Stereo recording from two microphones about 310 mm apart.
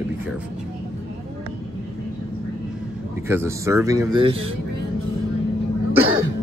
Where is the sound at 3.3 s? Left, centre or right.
Centre.